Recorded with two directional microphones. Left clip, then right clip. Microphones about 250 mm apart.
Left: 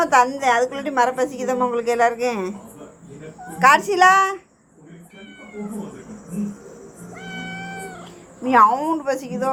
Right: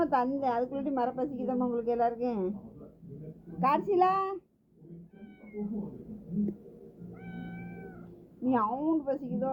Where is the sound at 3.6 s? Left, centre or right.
Centre.